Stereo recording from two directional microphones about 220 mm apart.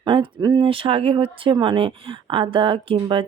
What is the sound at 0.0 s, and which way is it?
Speech, 20° right (ahead or behind).